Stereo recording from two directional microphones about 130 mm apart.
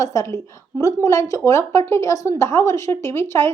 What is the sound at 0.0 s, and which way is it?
A woman's voice, 25° left (ahead or behind).